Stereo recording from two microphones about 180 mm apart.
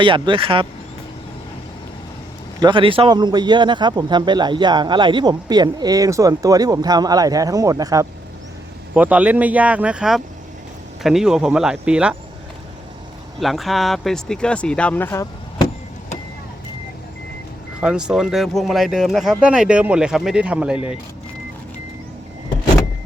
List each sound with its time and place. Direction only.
0.0 s a man's voice: 30° right (ahead or behind)
2.6 s a man's voice: 25° right (ahead or behind)
9.0 s speech: 10° right (ahead or behind)
13.4 s speech: centre (ahead or behind)
17.7 s speech: 5° right (ahead or behind)